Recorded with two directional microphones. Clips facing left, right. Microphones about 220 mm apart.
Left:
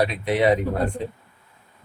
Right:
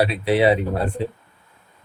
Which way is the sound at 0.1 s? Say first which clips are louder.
Right 2 dB; 30° right (ahead or behind).